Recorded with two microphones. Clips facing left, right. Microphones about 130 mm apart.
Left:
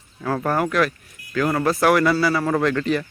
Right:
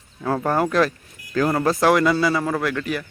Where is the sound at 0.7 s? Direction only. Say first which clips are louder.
Right 1 dB; 30° right (ahead or behind).